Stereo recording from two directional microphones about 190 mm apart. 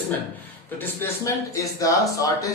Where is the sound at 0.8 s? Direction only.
10° left (ahead or behind).